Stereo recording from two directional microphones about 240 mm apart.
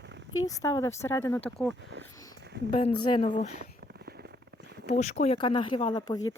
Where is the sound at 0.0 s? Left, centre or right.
Right.